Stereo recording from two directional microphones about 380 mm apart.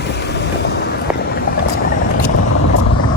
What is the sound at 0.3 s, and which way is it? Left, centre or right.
Vehicle, left.